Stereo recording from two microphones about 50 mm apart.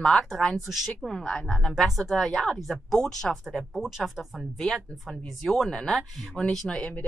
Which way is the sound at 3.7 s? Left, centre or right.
Centre.